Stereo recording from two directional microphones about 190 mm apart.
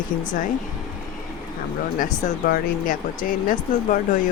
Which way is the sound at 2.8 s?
45° left (ahead or behind).